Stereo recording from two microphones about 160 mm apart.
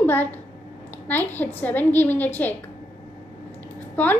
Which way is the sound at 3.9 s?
10° left (ahead or behind).